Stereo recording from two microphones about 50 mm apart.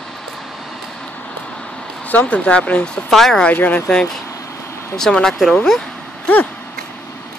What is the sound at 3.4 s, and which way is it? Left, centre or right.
Speech, left.